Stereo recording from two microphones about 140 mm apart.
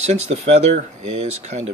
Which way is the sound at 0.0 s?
55° right (ahead or behind).